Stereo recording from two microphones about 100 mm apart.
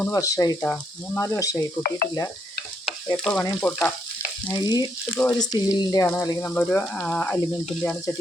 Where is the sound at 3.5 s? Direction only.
15° left (ahead or behind).